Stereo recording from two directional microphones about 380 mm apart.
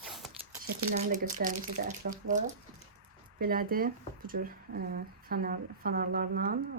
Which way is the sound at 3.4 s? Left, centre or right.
Right.